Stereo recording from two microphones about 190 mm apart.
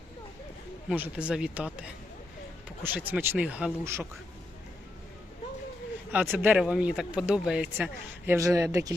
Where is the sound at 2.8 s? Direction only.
10° right (ahead or behind).